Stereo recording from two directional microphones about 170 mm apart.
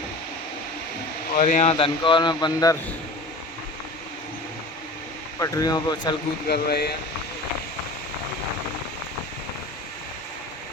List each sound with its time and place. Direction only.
1.4 s speech: 45° left (ahead or behind)
1.7 s speech: 30° left (ahead or behind)
5.4 s speech: 20° left (ahead or behind)
6.5 s speech: 70° left (ahead or behind)